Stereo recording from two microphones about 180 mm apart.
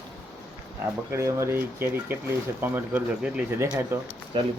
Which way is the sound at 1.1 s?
15° right (ahead or behind).